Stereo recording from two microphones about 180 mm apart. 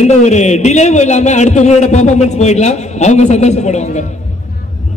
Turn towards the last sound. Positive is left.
turn(degrees=40)  # may be behind; listen again after turning